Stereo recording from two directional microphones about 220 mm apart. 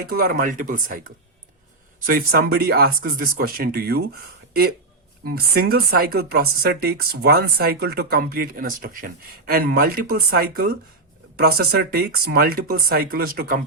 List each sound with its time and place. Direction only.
0.1 s speech: 45° right (ahead or behind)
5.2 s speech: 45° right (ahead or behind)